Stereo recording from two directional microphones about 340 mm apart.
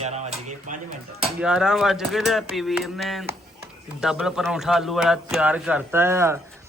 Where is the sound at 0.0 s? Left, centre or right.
Centre.